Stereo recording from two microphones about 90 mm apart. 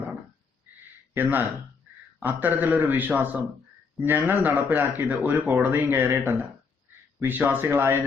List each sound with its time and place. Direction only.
1.1 s speech: 20° right (ahead or behind)